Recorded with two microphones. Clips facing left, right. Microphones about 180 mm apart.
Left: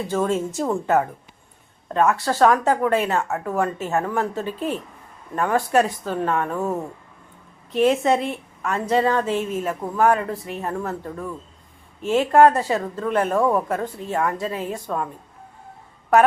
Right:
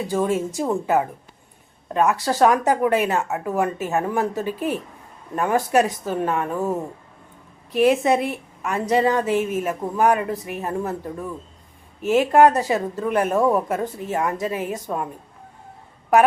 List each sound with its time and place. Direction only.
0.1 s a woman's voice: 15° right (ahead or behind)